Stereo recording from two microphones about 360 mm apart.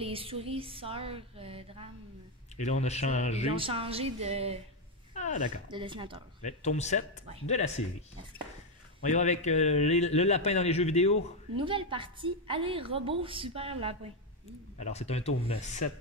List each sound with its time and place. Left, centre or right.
0.0 s a woman's voice: centre
2.5 s speech: centre
3.4 s a woman's voice: centre
5.1 s speech: centre
5.7 s a woman's voice: centre
6.4 s speech: centre
9.0 s a man's voice: centre
11.5 s a woman's voice: centre
14.8 s a man's voice: centre